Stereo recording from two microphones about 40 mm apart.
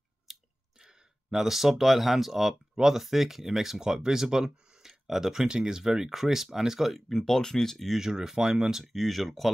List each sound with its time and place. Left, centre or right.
0.3 s clicking: centre
2.7 s speech: centre
7.1 s speech: centre
8.0 s speech: centre
8.8 s speech: centre